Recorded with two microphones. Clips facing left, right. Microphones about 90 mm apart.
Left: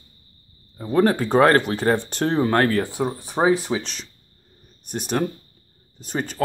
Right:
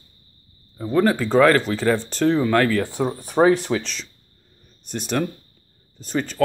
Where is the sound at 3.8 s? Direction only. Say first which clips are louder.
Right 1 dB; 45° left (ahead or behind).